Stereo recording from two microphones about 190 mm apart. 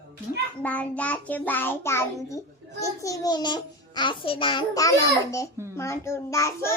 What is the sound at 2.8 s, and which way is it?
A child's voice, 15° left (ahead or behind).